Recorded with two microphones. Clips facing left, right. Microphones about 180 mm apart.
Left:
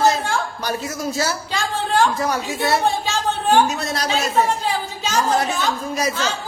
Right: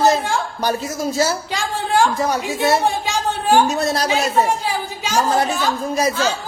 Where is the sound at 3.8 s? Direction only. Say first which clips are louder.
Right 5 dB; 35° right (ahead or behind).